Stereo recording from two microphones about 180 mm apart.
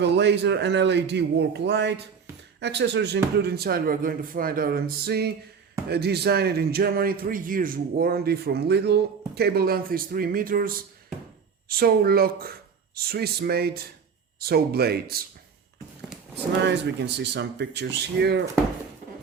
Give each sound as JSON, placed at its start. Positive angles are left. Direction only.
{"t": 0.0, "sound": "speech", "side_deg": -70}
{"t": 16.6, "sound": "speech", "side_deg": -70}